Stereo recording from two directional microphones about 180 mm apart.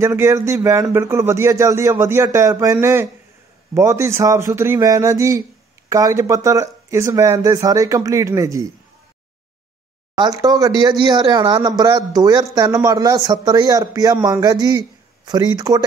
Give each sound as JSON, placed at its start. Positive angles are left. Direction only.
{"t": 0.0, "sound": "speech", "side_deg": -15}
{"t": 10.1, "sound": "speech", "side_deg": -20}